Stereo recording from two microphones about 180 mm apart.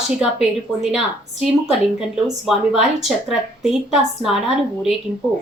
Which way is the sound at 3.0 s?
Centre (ahead or behind).